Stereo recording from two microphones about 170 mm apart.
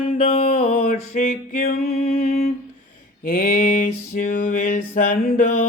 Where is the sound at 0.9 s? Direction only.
55° left (ahead or behind).